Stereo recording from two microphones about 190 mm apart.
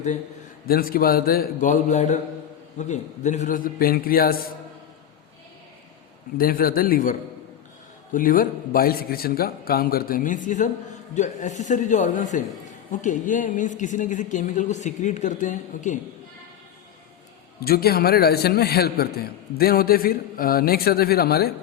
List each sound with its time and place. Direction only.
0.6 s a man's voice: 50° left (ahead or behind)
6.3 s a man's voice: 50° left (ahead or behind)
17.6 s a man's voice: 55° left (ahead or behind)